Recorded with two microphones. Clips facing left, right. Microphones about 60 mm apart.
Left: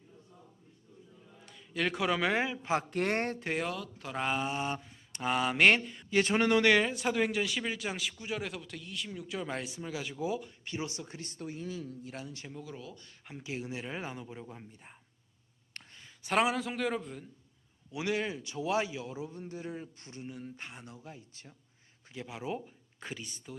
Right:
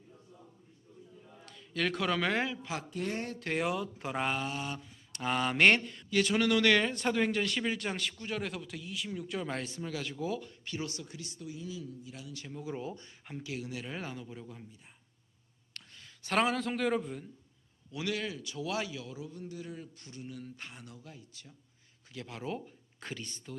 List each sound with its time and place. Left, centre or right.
1.5 s speech: centre
2.9 s speech: left
3.7 s speech: right
4.4 s mantra: left
5.2 s speech: centre
6.1 s a man's voice: left
6.7 s speech: centre
10.7 s a man's voice: left
11.2 s speech: left
12.6 s speech: right
13.4 s a man's voice: left
16.0 s a man's voice: centre
17.9 s a man's voice: left
22.1 s speech: centre